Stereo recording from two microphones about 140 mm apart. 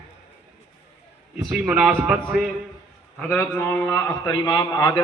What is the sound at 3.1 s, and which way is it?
A man's voice, 10° left (ahead or behind).